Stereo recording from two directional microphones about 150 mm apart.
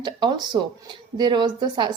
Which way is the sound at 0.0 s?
30° right (ahead or behind).